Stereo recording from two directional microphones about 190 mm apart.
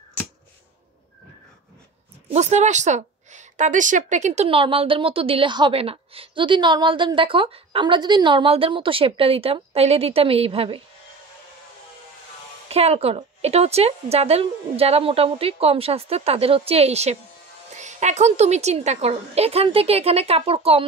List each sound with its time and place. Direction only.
2.2 s a woman's voice: 35° right (ahead or behind)
12.6 s a woman's voice: 30° right (ahead or behind)